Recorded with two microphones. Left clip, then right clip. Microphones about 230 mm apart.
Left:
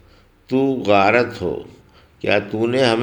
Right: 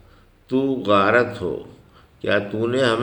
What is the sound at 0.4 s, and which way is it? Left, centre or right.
Speech, left.